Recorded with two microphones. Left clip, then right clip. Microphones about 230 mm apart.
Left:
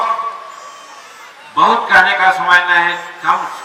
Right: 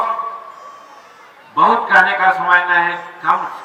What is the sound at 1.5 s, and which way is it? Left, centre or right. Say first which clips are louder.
A man's voice: left 1 dB; centre.